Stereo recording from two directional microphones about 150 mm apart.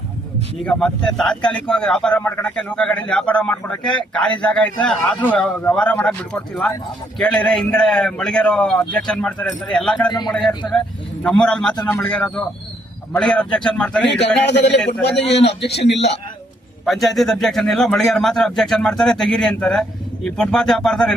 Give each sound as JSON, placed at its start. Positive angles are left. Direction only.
{"t": 0.6, "sound": "a man's voice", "side_deg": 5}
{"t": 10.1, "sound": "speech", "side_deg": 30}
{"t": 10.7, "sound": "a man's voice", "side_deg": 5}
{"t": 15.4, "sound": "a man's voice", "side_deg": 90}
{"t": 16.8, "sound": "speech", "side_deg": 0}